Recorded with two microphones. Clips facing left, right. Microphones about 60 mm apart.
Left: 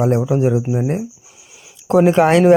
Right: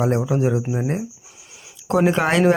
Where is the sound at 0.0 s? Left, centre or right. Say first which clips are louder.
Left 4 dB; centre.